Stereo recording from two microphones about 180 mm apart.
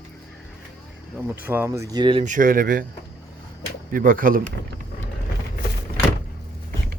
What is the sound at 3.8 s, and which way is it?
Speech, 50° right (ahead or behind).